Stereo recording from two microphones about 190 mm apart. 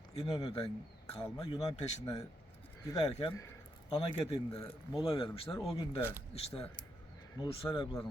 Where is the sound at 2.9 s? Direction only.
20° left (ahead or behind).